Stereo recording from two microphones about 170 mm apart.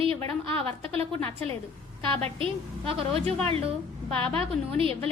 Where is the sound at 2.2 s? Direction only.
35° right (ahead or behind).